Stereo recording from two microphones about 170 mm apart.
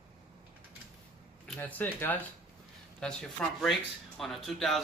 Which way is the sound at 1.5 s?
10° left (ahead or behind).